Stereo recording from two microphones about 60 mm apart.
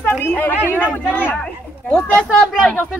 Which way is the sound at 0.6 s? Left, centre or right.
Right.